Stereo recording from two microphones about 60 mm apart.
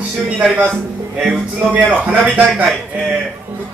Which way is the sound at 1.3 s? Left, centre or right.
Right.